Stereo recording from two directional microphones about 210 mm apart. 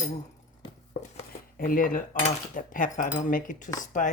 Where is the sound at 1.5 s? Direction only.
40° left (ahead or behind).